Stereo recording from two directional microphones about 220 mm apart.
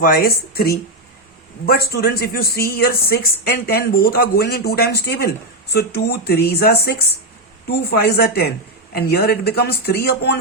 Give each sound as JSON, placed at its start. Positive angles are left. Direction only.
{"t": 0.0, "sound": "speech", "side_deg": 40}